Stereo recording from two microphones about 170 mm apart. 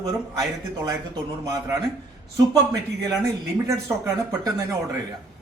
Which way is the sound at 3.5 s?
15° right (ahead or behind).